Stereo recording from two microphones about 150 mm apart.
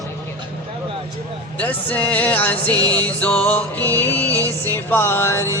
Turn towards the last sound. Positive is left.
turn(degrees=20)  # may be behind; listen again after turning